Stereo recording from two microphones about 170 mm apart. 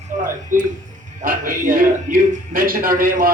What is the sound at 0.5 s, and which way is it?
A man's voice, 50° right (ahead or behind).